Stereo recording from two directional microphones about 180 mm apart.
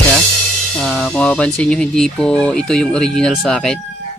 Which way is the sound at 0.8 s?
5° left (ahead or behind).